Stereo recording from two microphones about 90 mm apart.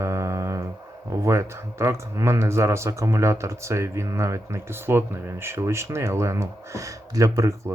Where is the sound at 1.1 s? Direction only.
35° right (ahead or behind).